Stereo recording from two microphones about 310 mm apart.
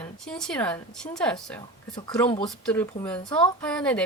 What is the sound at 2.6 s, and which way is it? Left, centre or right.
Speech, centre.